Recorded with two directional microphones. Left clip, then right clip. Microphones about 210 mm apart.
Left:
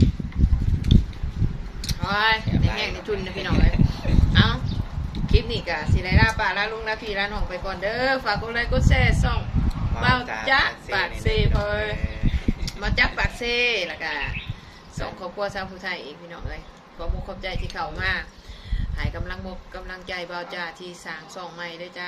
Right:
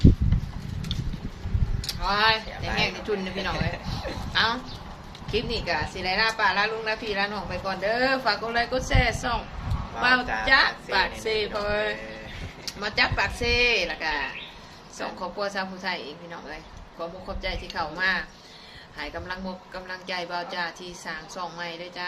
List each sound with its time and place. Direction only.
1.9 s a sound: 15° right (ahead or behind)
2.7 s a woman's voice: 15° right (ahead or behind)
17.4 s a woman's voice: 15° right (ahead or behind)